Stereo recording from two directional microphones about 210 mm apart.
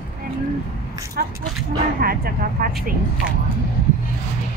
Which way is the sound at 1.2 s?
45° right (ahead or behind).